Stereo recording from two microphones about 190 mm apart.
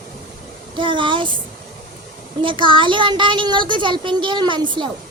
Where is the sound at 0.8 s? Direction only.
25° right (ahead or behind).